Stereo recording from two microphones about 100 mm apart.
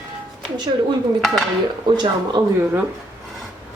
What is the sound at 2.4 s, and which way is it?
Speech, 40° right (ahead or behind).